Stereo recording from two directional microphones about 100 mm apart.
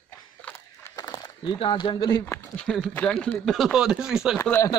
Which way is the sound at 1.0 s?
45° left (ahead or behind).